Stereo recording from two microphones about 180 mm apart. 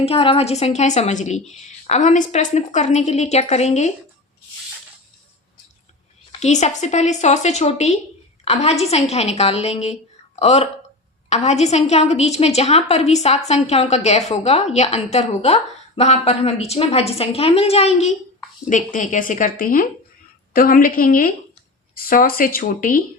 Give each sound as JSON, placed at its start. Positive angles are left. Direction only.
{"t": 0.0, "sound": "a woman's voice", "side_deg": 30}
{"t": 6.4, "sound": "a woman's voice", "side_deg": 40}